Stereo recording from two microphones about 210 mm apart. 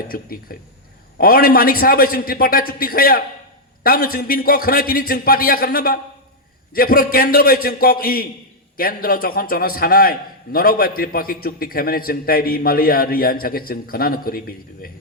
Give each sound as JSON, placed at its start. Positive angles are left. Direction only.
{"t": 0.1, "sound": "a man's voice", "side_deg": 45}